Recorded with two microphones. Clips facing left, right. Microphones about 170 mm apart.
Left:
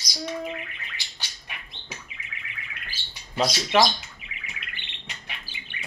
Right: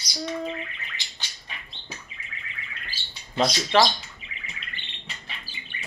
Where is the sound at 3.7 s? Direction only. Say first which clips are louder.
Even; 10° left (ahead or behind).